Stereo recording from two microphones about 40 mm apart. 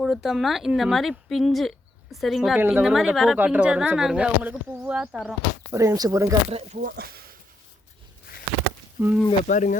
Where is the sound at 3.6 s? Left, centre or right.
Right.